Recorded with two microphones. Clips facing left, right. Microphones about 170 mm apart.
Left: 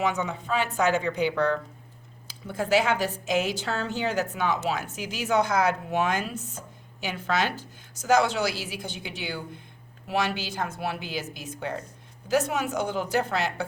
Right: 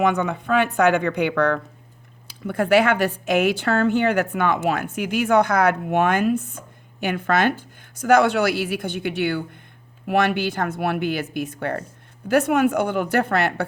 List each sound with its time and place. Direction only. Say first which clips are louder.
0.0 s a woman's voice: right 7 dB; 60° right (ahead or behind)